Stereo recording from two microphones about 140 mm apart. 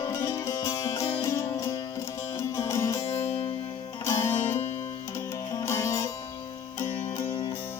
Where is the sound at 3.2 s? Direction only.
45° left (ahead or behind).